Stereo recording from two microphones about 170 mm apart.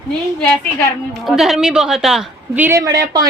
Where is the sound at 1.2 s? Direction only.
Centre (ahead or behind).